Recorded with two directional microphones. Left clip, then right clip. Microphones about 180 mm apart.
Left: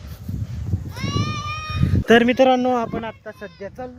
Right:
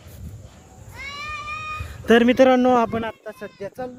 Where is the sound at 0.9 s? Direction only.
55° left (ahead or behind).